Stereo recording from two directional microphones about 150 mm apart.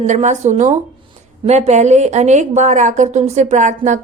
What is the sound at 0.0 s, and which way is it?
A woman's voice, 50° right (ahead or behind).